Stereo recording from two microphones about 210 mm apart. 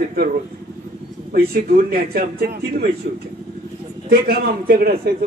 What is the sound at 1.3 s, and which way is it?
A man's voice, 45° right (ahead or behind).